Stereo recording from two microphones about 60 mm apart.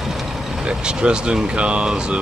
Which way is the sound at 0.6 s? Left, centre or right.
Centre.